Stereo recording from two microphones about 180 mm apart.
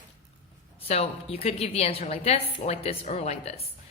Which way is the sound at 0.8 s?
35° left (ahead or behind).